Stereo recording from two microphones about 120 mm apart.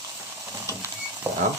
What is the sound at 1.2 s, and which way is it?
Rodents, 15° right (ahead or behind).